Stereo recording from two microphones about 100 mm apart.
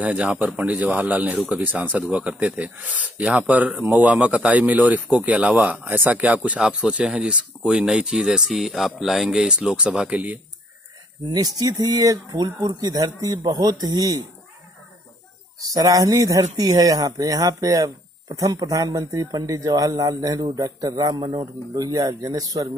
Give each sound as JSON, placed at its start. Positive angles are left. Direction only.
{"t": 0.0, "sound": "speech", "side_deg": -15}
{"t": 11.2, "sound": "speech", "side_deg": -40}
{"t": 15.6, "sound": "speech", "side_deg": -35}